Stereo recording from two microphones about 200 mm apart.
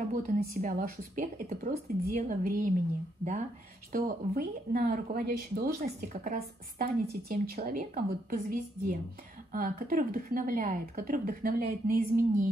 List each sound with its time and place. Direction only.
0.1 s a woman's voice: 40° right (ahead or behind)
3.9 s speech: 50° right (ahead or behind)